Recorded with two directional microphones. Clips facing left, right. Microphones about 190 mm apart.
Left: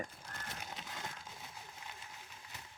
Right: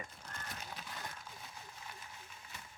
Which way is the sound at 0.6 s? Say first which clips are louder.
Left 1 dB; 20° left (ahead or behind).